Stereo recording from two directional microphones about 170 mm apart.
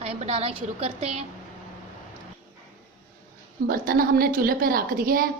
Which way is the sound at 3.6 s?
60° right (ahead or behind).